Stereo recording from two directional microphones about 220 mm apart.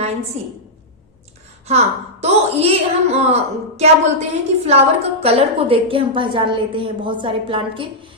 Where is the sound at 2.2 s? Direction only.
30° right (ahead or behind).